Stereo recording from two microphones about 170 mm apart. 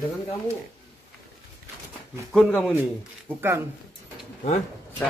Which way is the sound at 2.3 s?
Centre (ahead or behind).